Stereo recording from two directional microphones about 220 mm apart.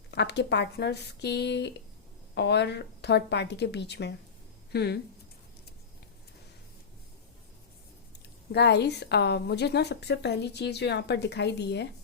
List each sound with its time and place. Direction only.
0.1 s a woman's voice: 50° left (ahead or behind)
8.5 s a woman's voice: 50° left (ahead or behind)